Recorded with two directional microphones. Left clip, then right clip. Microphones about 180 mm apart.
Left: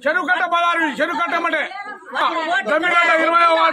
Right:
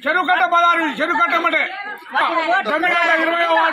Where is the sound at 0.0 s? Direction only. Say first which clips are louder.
Right 2 dB; 25° left (ahead or behind).